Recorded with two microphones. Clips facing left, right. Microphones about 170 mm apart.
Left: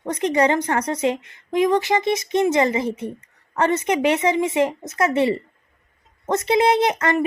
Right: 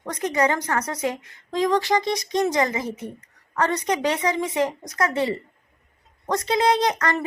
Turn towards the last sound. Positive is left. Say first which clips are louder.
# left 3 dB
turn(degrees=25)  # may be behind; listen again after turning